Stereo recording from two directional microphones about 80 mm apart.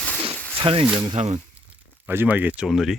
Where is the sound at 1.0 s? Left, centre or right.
Right.